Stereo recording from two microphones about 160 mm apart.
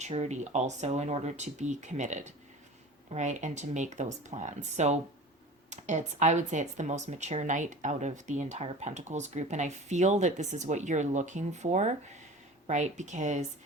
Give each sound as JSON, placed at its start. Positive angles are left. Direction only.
{"t": 0.0, "sound": "speech", "side_deg": -45}